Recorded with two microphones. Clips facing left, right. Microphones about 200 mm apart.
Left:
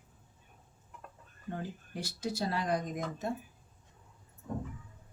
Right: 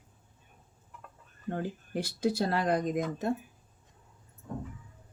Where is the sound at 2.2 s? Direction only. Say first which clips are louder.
Right 6 dB; 60° right (ahead or behind).